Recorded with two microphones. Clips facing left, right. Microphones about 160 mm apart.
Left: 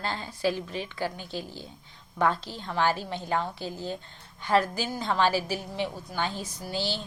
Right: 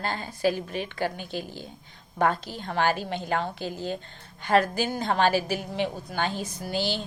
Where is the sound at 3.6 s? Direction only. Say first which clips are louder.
Right 3 dB; 15° right (ahead or behind).